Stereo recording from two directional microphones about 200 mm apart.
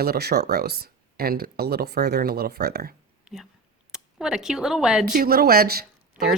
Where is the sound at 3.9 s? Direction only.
Centre (ahead or behind).